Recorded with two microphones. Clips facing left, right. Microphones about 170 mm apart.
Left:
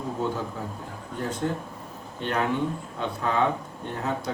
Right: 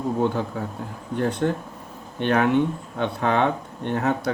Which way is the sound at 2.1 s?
65° right (ahead or behind).